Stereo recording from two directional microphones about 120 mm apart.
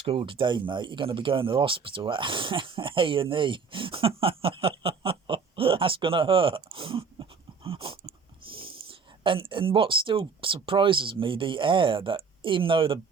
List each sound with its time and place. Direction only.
0.0 s speech: 45° right (ahead or behind)